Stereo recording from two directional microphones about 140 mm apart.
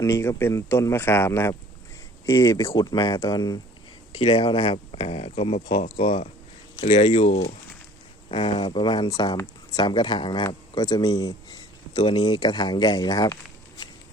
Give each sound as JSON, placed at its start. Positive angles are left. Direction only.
{"t": 0.0, "sound": "speech", "side_deg": 20}
{"t": 4.2, "sound": "speech", "side_deg": 45}
{"t": 8.3, "sound": "speech", "side_deg": 40}